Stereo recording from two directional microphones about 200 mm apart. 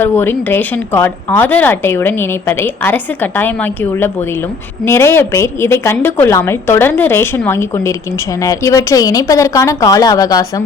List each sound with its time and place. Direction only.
0.0 s a woman's voice: 10° left (ahead or behind)